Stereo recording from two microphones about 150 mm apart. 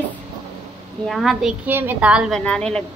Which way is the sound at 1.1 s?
Centre (ahead or behind).